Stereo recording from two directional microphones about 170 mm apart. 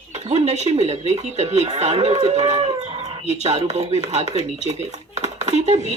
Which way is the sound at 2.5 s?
40° right (ahead or behind).